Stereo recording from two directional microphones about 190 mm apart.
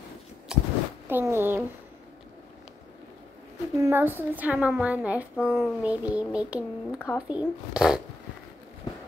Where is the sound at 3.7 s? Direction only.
10° right (ahead or behind).